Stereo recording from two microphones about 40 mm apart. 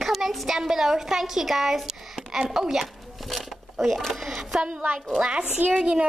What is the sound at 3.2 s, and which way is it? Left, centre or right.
Speech, centre.